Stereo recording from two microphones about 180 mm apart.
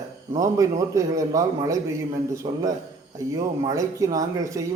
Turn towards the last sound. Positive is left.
turn(degrees=-20)  # may be behind; listen again after turning